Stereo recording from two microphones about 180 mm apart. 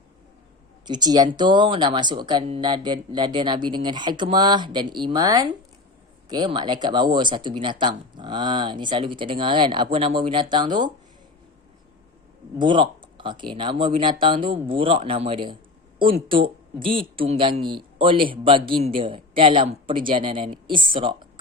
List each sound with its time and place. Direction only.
0.9 s speech: 20° right (ahead or behind)
12.5 s speech: 25° right (ahead or behind)